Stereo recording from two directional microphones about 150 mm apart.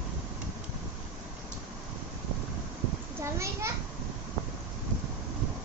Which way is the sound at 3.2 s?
20° right (ahead or behind).